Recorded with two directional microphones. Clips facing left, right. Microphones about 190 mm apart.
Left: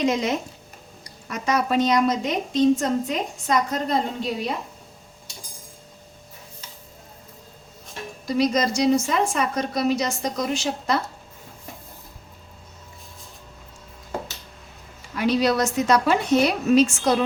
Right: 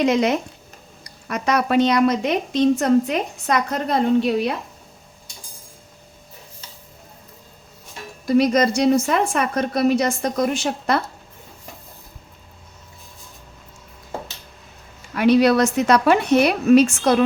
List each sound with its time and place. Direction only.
0.0 s a woman's voice: 65° right (ahead or behind)
8.3 s a woman's voice: 60° right (ahead or behind)
15.1 s a woman's voice: 65° right (ahead or behind)